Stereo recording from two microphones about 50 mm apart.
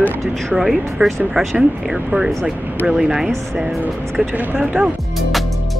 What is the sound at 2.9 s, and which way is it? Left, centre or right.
Speech, centre.